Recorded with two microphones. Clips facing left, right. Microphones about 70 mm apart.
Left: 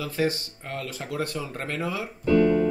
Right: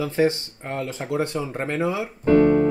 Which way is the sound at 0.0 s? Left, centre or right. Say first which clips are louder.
Right 5 dB; right.